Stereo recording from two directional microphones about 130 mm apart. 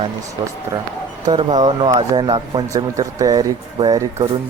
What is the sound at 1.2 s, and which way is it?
Speech, 35° right (ahead or behind).